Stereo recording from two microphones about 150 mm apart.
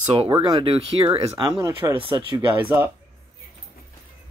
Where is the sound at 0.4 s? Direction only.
35° right (ahead or behind).